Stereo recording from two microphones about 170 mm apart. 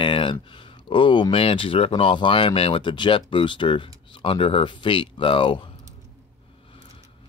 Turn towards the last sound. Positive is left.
turn(degrees=30)  # may be behind; listen again after turning